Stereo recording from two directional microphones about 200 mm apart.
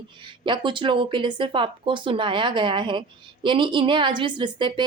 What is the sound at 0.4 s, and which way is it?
A woman's voice, 25° right (ahead or behind).